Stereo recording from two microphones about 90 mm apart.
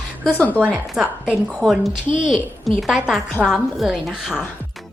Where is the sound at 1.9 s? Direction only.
65° right (ahead or behind).